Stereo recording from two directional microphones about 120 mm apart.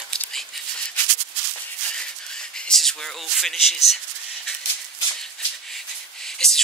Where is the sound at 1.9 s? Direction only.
5° left (ahead or behind).